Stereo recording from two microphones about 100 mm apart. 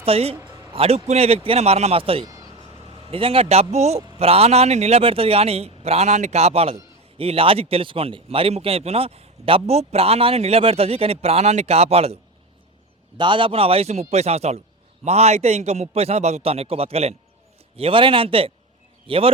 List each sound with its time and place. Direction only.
0.0 s a man's voice: 80° right
2.2 s vehicle: 40° right (ahead or behind)
3.1 s speech: 70° right (ahead or behind); by 6.7 s 85° right
7.2 s a man's voice: 70° right (ahead or behind); by 12.2 s 90° right
13.1 s a man's voice: 55° right (ahead or behind); by 17.2 s 90° right
17.7 s speech: 65° right (ahead or behind)